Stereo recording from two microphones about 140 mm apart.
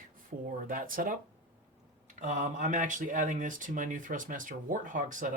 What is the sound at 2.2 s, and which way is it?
Speech, 65° right (ahead or behind).